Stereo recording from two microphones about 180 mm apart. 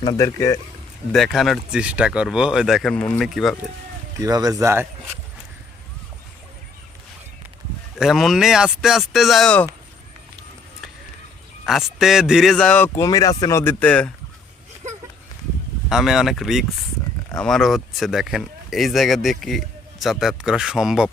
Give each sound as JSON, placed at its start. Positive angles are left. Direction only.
{"t": 0.0, "sound": "speech", "side_deg": 20}
{"t": 1.1, "sound": "speech", "side_deg": 0}
{"t": 4.2, "sound": "speech", "side_deg": -20}
{"t": 7.9, "sound": "speech", "side_deg": 0}
{"t": 11.6, "sound": "speech", "side_deg": 0}
{"t": 15.9, "sound": "speech", "side_deg": 0}